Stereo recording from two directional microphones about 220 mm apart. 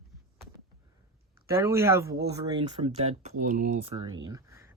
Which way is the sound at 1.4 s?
10° right (ahead or behind).